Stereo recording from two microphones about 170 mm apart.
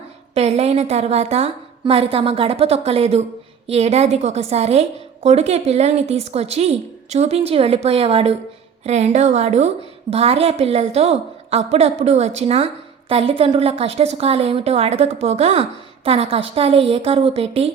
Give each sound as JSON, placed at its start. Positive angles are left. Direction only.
{"t": 0.3, "sound": "a woman's voice", "side_deg": -40}